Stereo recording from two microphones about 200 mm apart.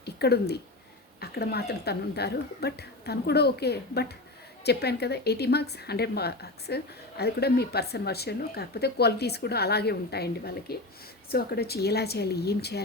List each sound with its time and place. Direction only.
0.0 s speech: 55° left (ahead or behind)